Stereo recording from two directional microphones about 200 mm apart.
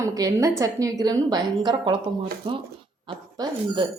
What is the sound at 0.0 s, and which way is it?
A woman's voice, 15° right (ahead or behind).